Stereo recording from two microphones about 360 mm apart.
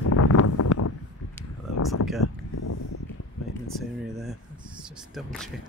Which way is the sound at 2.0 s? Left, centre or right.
Left.